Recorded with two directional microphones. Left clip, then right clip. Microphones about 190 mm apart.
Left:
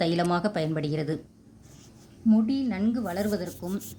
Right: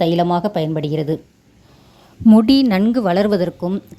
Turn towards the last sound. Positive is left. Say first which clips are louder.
# right 13 dB
turn(degrees=-40)  # may be behind; listen again after turning